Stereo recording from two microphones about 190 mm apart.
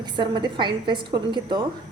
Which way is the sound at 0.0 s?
25° right (ahead or behind).